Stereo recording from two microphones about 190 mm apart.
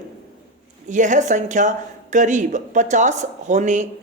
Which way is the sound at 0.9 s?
40° right (ahead or behind).